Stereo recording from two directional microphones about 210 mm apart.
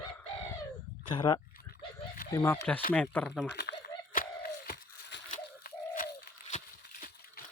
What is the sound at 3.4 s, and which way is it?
Crumpling, 55° left (ahead or behind).